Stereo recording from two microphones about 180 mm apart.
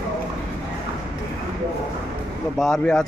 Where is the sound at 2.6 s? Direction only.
Centre (ahead or behind).